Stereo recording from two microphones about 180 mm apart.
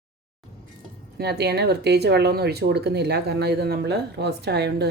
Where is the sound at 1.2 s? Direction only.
65° right (ahead or behind).